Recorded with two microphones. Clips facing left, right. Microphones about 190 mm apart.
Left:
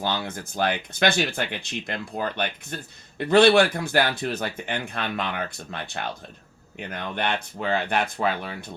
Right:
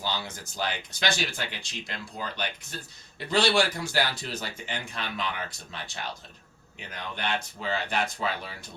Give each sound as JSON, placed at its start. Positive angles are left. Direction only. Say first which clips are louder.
{"t": 0.0, "sound": "speech", "louder": "left 6 dB", "side_deg": 55}